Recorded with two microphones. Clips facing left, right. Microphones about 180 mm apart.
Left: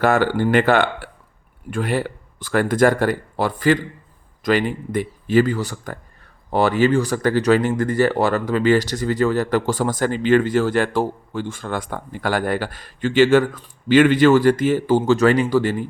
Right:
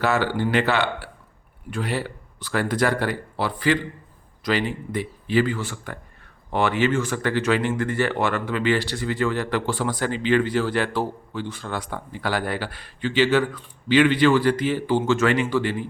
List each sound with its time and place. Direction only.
0.0 s speech: 50° left (ahead or behind)